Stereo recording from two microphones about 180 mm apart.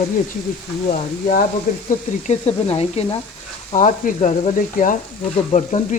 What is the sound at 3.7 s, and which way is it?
Stir, 45° left (ahead or behind).